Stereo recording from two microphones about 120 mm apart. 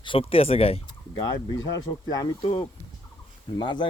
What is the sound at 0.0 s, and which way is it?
Speech, 50° left (ahead or behind).